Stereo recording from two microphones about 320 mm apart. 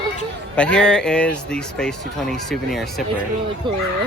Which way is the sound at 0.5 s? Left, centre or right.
Centre.